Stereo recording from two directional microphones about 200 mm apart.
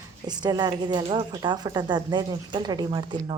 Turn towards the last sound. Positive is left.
turn(degrees=-20)  # may be behind; listen again after turning